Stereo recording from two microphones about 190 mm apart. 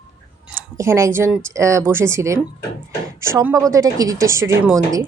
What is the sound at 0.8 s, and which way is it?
A woman's voice, 15° right (ahead or behind).